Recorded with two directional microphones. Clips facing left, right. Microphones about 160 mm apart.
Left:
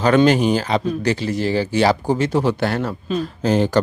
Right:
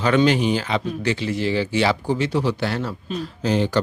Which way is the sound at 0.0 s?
45° left (ahead or behind).